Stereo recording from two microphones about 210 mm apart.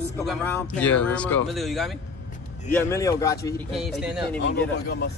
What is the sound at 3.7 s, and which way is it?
Speech, centre (ahead or behind).